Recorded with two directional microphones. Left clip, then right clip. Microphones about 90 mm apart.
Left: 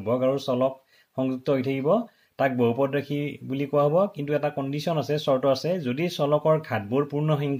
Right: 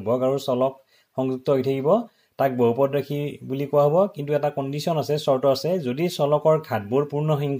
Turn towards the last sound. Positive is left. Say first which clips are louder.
# right 2 dB
turn(degrees=-25)  # may be behind; listen again after turning